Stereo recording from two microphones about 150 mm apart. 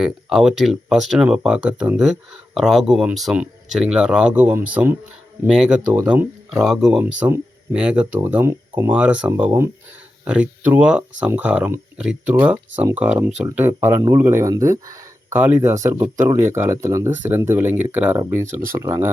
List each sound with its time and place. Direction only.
0.0 s speech: 5° right (ahead or behind)
7.0 s speech: 15° right (ahead or behind)